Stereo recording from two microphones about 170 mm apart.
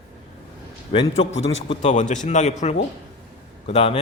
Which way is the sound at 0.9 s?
35° left (ahead or behind).